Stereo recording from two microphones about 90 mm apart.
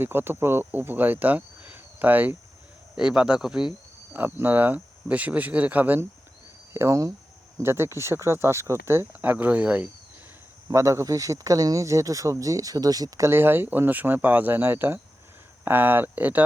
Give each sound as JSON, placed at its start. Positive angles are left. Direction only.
{"t": 0.0, "sound": "speech", "side_deg": -25}
{"t": 2.9, "sound": "speech", "side_deg": -10}
{"t": 4.1, "sound": "speech", "side_deg": -20}
{"t": 6.7, "sound": "speech", "side_deg": -35}
{"t": 9.2, "sound": "speech", "side_deg": -20}
{"t": 10.7, "sound": "speech", "side_deg": -35}